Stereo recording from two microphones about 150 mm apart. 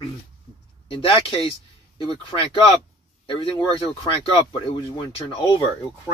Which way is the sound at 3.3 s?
35° left (ahead or behind).